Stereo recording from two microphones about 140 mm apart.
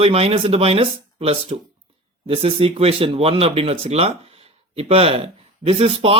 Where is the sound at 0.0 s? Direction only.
45° right (ahead or behind).